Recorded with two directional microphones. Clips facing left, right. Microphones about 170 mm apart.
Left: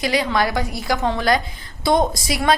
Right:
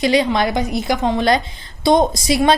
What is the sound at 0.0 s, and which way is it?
A woman's voice, 25° right (ahead or behind).